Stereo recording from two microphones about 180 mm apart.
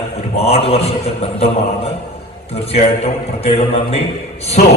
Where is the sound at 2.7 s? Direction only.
35° left (ahead or behind).